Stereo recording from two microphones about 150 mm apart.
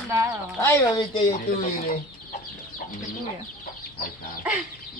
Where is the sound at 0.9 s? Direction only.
35° left (ahead or behind).